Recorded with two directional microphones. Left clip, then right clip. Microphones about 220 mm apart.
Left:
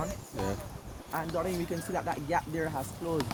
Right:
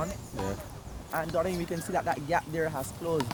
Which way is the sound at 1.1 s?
50° right (ahead or behind).